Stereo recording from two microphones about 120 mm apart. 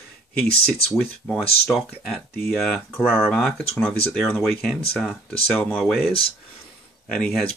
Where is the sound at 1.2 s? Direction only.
10° left (ahead or behind).